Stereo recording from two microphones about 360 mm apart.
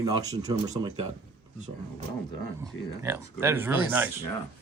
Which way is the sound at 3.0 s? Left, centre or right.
Centre.